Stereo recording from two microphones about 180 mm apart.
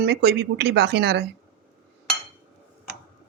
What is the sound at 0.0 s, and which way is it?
Cutlery, 65° right (ahead or behind).